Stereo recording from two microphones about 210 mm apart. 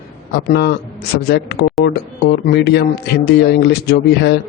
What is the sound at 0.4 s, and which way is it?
Speech, 50° left (ahead or behind).